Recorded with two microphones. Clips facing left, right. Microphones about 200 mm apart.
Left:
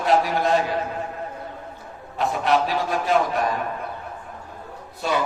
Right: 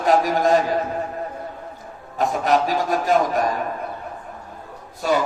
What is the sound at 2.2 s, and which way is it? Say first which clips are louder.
A man's voice: right 2 dB; 45° right (ahead or behind).